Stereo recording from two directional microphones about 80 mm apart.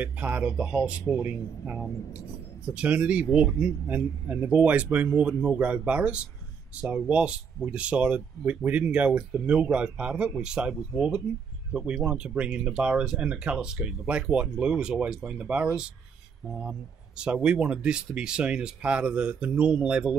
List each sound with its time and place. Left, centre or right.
0.0 s speech: centre
17.2 s speech: centre